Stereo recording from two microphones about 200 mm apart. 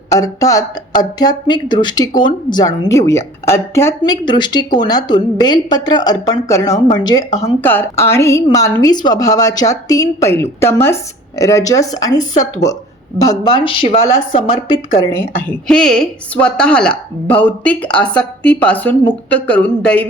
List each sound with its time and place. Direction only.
0.1 s a woman's voice: 15° left (ahead or behind)
15.1 s a woman's voice: 10° left (ahead or behind)